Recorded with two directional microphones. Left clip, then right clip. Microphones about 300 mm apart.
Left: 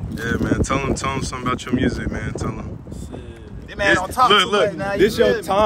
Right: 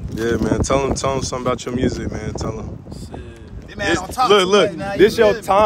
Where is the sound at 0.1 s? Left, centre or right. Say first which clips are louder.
Right 3 dB; centre.